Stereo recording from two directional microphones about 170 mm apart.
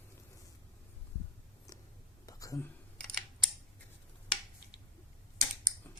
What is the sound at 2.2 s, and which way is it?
Computer keyboard, 20° left (ahead or behind).